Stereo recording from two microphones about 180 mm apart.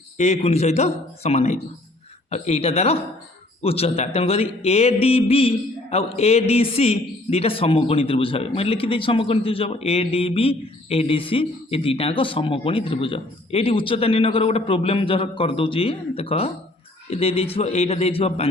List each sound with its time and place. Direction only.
0.2 s speech: 35° left (ahead or behind)